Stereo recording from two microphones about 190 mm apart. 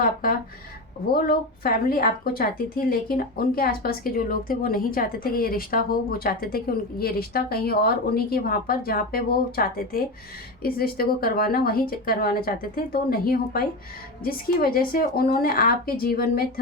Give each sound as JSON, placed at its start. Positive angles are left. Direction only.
{"t": 0.0, "sound": "a woman's voice", "side_deg": 50}